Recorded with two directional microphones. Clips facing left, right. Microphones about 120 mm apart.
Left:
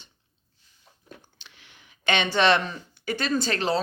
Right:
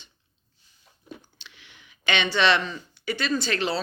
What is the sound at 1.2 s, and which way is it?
Speech, 45° left (ahead or behind).